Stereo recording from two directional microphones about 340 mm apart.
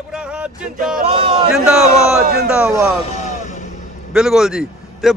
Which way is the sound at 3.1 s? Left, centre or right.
Left.